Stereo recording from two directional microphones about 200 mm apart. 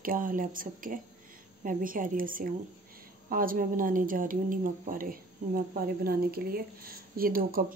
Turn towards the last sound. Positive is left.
turn(degrees=-45)  # may be behind; listen again after turning